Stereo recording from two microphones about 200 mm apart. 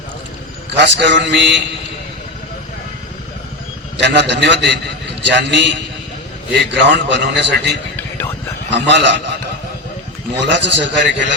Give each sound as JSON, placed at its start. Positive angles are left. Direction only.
{"t": 0.9, "sound": "a man's voice", "side_deg": -60}
{"t": 3.9, "sound": "a man's voice", "side_deg": -60}
{"t": 6.8, "sound": "a man's voice", "side_deg": -60}
{"t": 7.9, "sound": "a sound", "side_deg": 10}
{"t": 8.7, "sound": "a man's voice", "side_deg": -65}
{"t": 10.4, "sound": "a man's voice", "side_deg": -65}